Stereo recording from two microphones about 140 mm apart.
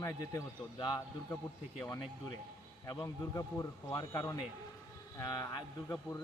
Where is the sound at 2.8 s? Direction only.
25° left (ahead or behind).